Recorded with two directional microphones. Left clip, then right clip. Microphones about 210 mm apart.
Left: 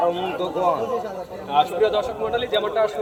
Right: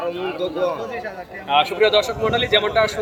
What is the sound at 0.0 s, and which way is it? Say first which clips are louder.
Speech: left 4 dB; 35° left (ahead or behind).